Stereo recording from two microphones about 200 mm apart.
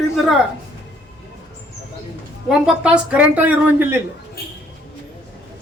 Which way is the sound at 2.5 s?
5° right (ahead or behind).